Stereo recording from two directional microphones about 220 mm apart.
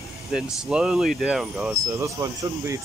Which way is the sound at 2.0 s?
15° right (ahead or behind).